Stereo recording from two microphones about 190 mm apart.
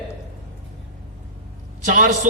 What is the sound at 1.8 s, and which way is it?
Speech, 45° right (ahead or behind).